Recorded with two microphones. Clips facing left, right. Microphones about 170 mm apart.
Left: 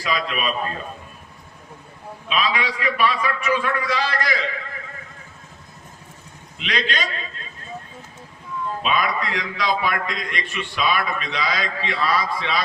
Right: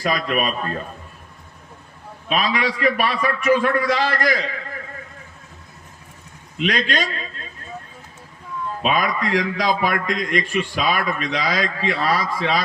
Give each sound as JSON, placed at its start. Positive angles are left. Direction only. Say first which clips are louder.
{"t": 0.0, "sound": "a man's voice", "louder": "right 3 dB", "side_deg": -50}
{"t": 2.3, "sound": "a man's voice", "louder": "right 2 dB", "side_deg": -45}
{"t": 6.6, "sound": "a man's voice", "louder": "right 4 dB", "side_deg": -45}
{"t": 8.8, "sound": "a man's voice", "louder": "right 3 dB", "side_deg": -45}